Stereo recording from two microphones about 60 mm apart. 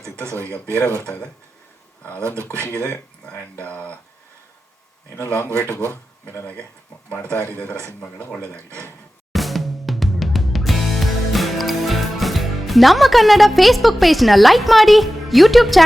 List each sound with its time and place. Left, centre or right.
2.2 s speech: right
2.7 s speech: left
5.1 s speech: left
7.1 s speech: left
8.5 s speech: right
9.3 s music: centre